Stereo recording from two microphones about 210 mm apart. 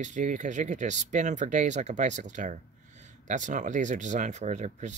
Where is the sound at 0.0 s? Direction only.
35° right (ahead or behind).